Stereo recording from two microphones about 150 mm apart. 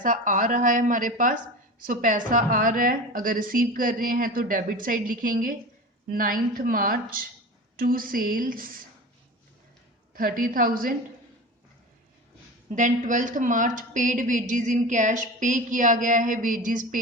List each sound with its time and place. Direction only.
0.0 s a woman's voice: 60° right (ahead or behind)
10.2 s a woman's voice: 70° right (ahead or behind)
12.7 s a woman's voice: 55° right (ahead or behind)